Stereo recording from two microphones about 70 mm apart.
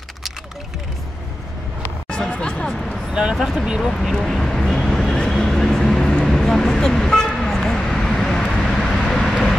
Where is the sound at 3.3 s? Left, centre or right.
Centre.